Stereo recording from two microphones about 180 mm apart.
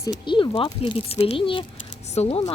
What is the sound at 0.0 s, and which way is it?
Speech, 25° left (ahead or behind).